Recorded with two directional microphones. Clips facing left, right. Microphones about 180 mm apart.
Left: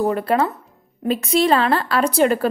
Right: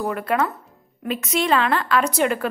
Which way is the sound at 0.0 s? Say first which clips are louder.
Left 4 dB; 30° left (ahead or behind).